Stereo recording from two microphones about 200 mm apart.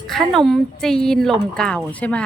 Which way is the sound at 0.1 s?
Centre (ahead or behind).